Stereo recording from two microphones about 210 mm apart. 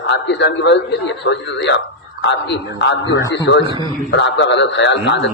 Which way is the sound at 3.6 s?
20° right (ahead or behind).